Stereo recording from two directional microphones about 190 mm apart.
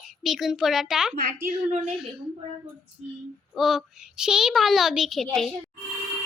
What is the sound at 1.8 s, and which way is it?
Speech, 5° right (ahead or behind).